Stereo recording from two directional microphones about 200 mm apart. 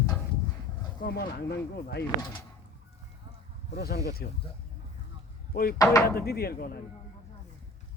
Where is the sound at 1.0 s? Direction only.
50° left (ahead or behind).